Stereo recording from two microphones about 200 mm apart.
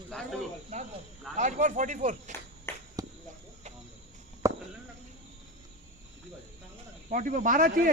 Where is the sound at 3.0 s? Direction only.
20° right (ahead or behind).